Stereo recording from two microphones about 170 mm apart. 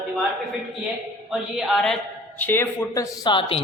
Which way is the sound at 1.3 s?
Centre (ahead or behind).